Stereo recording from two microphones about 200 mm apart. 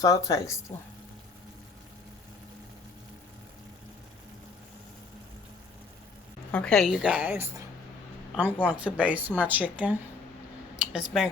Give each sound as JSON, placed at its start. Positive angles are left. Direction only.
{"t": 0.0, "sound": "speech", "side_deg": 15}
{"t": 6.5, "sound": "a woman's voice", "side_deg": 5}
{"t": 8.6, "sound": "speech", "side_deg": -5}